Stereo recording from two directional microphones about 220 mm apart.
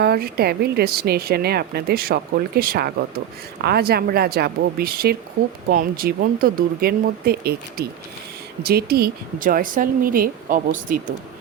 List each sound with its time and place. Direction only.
0.0 s speech: 45° right (ahead or behind)